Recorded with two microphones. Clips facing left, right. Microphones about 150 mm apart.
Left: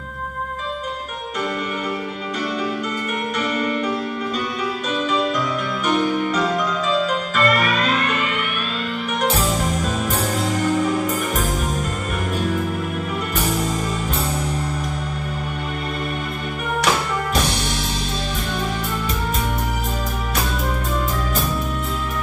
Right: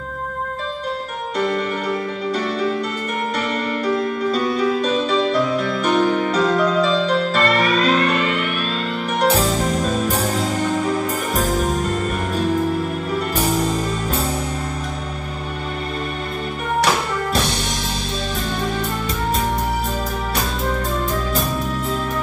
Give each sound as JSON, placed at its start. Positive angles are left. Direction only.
{"t": 4.3, "sound": "music", "side_deg": -35}